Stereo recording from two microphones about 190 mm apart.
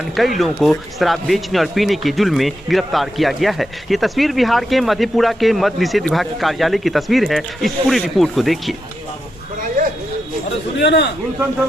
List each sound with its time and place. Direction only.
0.3 s speech: centre (ahead or behind)
10.8 s a man's voice: 65° left (ahead or behind)